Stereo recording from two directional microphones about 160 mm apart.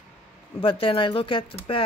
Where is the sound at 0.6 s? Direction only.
35° left (ahead or behind).